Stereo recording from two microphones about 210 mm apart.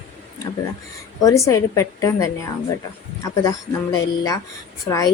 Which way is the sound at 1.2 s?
15° left (ahead or behind).